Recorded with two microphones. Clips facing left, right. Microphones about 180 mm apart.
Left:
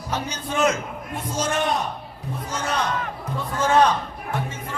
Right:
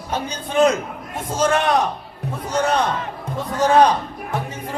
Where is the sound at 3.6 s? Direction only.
35° right (ahead or behind).